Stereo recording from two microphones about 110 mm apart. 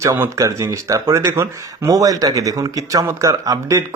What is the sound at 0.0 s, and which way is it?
Speech, 25° right (ahead or behind).